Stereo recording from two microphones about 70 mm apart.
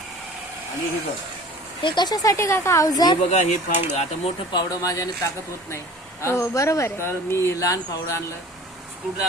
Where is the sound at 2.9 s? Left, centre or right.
Left.